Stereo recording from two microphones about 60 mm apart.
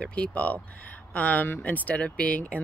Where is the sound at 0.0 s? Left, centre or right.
Centre.